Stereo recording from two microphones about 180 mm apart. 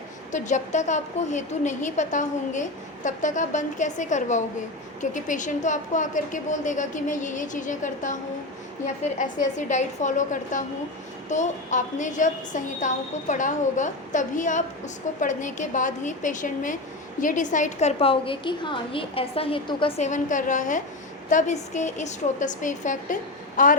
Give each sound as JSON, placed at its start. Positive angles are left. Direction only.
{"t": 0.3, "sound": "a woman's voice", "side_deg": 45}
{"t": 20.1, "sound": "a woman's voice", "side_deg": 45}